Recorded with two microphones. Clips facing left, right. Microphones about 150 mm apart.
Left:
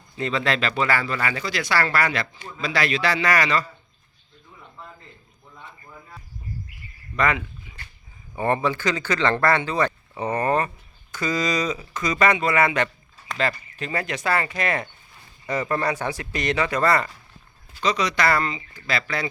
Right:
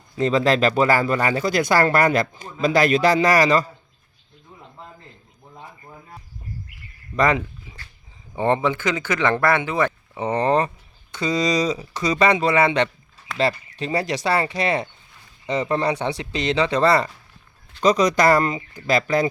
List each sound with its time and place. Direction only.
0.2 s speech: 40° right (ahead or behind)
7.2 s a sound: 35° right (ahead or behind)
8.4 s speech: 20° right (ahead or behind)
13.7 s speech: 30° right (ahead or behind)
17.7 s speech: 45° right (ahead or behind)